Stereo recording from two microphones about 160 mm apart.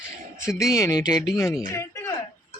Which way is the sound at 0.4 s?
20° left (ahead or behind).